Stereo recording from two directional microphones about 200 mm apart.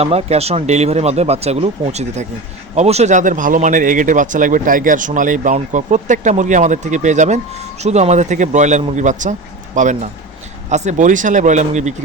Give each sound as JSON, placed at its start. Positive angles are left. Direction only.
{"t": 0.0, "sound": "speech", "side_deg": -30}